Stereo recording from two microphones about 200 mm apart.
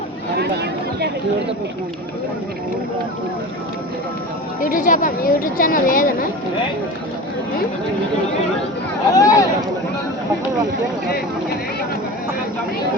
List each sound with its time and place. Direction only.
0.3 s a sound: 55° right (ahead or behind)
4.6 s a woman's voice: 40° left (ahead or behind)
9.1 s speech: 15° left (ahead or behind)